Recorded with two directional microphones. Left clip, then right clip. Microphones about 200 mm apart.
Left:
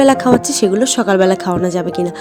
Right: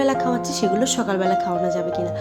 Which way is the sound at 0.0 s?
40° left (ahead or behind).